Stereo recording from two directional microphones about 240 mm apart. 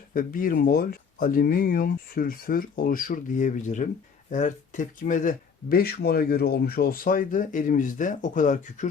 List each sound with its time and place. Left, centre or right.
0.1 s speech: left